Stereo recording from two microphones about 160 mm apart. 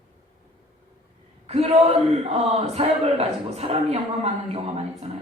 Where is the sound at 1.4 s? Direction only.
40° right (ahead or behind).